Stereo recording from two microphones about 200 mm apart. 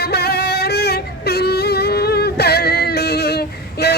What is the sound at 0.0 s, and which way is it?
Singing, 50° left (ahead or behind).